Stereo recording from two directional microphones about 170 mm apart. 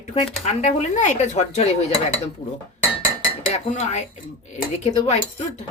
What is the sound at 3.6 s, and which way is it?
Speech, 35° left (ahead or behind).